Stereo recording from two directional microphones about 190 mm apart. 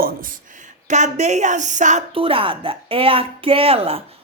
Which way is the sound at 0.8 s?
40° right (ahead or behind).